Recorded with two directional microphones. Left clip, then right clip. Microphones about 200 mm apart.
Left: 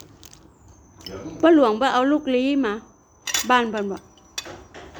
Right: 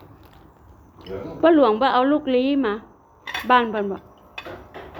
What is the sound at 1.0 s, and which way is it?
A woman's voice, 25° left (ahead or behind).